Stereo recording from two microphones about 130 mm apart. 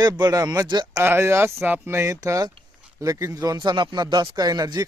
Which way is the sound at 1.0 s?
20° right (ahead or behind).